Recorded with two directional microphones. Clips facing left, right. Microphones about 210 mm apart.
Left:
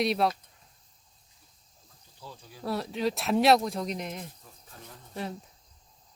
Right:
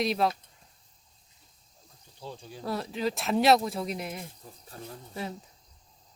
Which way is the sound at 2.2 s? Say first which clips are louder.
Right 5 dB; 25° right (ahead or behind).